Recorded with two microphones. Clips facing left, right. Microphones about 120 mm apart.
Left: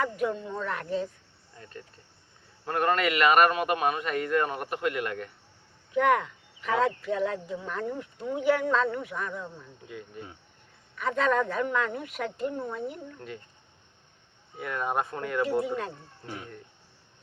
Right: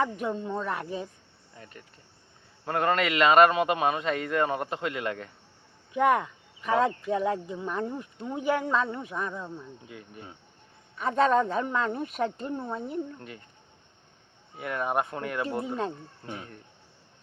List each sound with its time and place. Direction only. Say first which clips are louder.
0.0 s a man's voice: even; 25° right (ahead or behind)
10.9 s speech: right 3 dB; 30° right (ahead or behind)
14.6 s a man's voice: right 1 dB; 20° right (ahead or behind)